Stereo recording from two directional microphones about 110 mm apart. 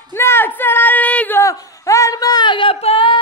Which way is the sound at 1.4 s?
30° left (ahead or behind).